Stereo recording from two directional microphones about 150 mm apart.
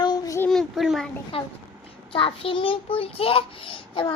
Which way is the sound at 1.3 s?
35° left (ahead or behind).